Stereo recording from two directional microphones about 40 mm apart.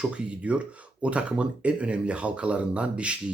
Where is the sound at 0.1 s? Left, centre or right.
Right.